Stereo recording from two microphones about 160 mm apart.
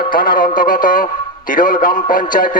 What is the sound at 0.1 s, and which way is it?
A man's voice, 60° left (ahead or behind).